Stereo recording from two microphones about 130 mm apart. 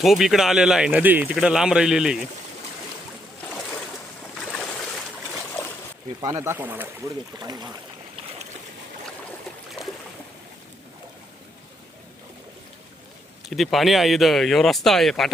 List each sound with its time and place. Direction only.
0.0 s speech: centre (ahead or behind)
4.4 s boat: 5° left (ahead or behind)
6.2 s speech: 20° right (ahead or behind)
7.3 s speech: 30° right (ahead or behind)
13.4 s speech: centre (ahead or behind)